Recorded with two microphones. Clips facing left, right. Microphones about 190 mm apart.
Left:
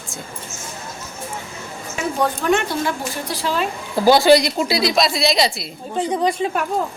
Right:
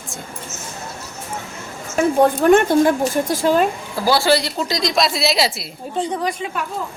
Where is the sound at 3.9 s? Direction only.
20° left (ahead or behind); by 5.6 s 5° right (ahead or behind).